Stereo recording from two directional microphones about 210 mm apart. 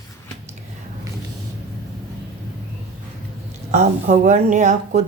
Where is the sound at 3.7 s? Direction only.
35° right (ahead or behind).